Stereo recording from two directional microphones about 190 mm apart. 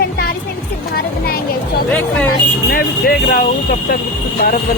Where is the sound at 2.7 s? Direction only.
55° left (ahead or behind).